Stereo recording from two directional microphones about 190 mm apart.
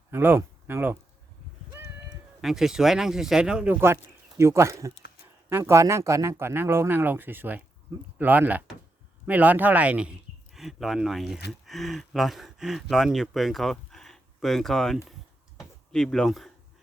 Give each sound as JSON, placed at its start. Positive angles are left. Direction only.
{"t": 0.1, "sound": "speech", "side_deg": -10}
{"t": 1.7, "sound": "cat", "side_deg": -15}
{"t": 2.4, "sound": "a man's voice", "side_deg": 0}
{"t": 15.5, "sound": "a sound", "side_deg": 5}